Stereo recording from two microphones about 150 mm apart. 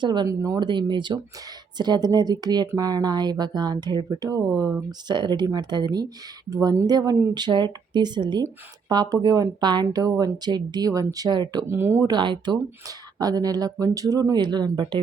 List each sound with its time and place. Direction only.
0.0 s speech: 30° right (ahead or behind)
11.7 s speech: 15° right (ahead or behind)
12.1 s speech: 30° right (ahead or behind)